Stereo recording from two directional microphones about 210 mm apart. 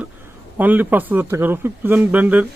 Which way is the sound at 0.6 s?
10° right (ahead or behind).